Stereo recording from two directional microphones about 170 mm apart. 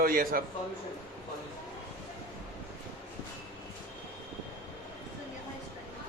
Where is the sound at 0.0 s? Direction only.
55° right (ahead or behind).